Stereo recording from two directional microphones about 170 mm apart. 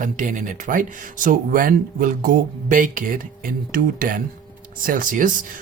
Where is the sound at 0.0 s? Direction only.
50° right (ahead or behind).